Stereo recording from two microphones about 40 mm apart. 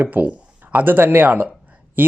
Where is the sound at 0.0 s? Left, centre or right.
Right.